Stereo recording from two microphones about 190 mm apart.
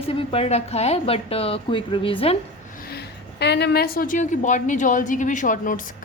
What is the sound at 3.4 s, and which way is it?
A woman's voice, 60° left (ahead or behind).